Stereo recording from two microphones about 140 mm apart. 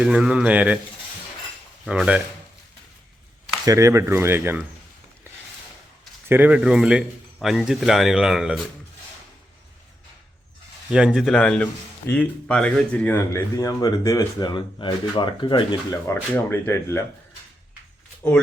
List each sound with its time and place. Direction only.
0.0 s speech: 5° right (ahead or behind)
1.9 s speech: 10° right (ahead or behind)
3.7 s speech: 20° right (ahead or behind)
6.2 s speech: 15° right (ahead or behind)
10.9 s speech: 5° right (ahead or behind)
13.1 s speech: 25° left (ahead or behind)
16.0 s speech: 20° left (ahead or behind)